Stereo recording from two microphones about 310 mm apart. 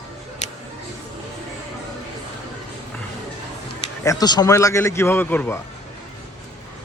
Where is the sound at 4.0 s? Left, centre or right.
Centre.